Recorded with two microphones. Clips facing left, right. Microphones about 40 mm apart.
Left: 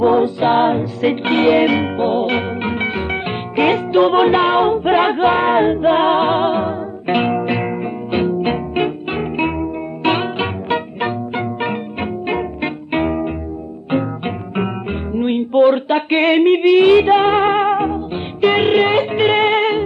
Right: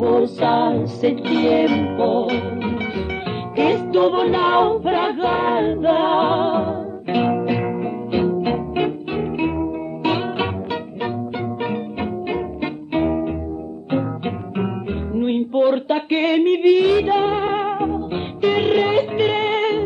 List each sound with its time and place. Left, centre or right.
0.0 s music: left
2.0 s music: left
2.3 s music: left
4.5 s music: centre
4.7 s music: left